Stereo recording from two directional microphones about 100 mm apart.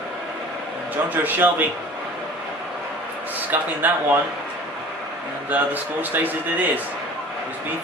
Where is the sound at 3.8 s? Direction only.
15° right (ahead or behind).